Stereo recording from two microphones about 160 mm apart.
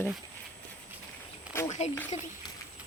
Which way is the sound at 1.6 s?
45° left (ahead or behind).